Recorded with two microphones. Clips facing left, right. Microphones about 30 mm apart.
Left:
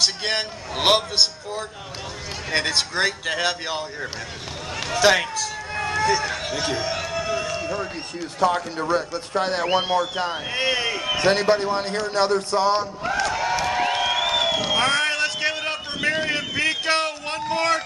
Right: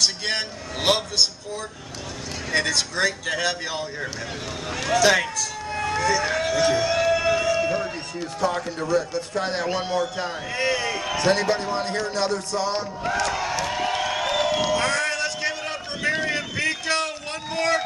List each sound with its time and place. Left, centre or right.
0.0 s a man's voice: centre
4.8 s a man's voice: centre
5.7 s vehicle: centre
6.4 s speech: centre
6.9 s a sound: centre
8.4 s a man's voice: left
13.0 s music: centre
14.7 s a sound: left